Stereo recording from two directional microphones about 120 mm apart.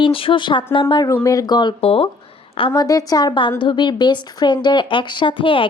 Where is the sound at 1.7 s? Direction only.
55° left (ahead or behind).